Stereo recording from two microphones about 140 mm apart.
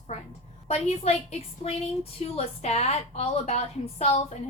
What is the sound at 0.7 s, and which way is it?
A woman's voice, 50° left (ahead or behind).